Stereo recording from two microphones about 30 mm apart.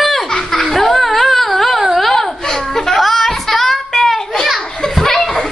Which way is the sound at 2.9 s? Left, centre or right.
Centre.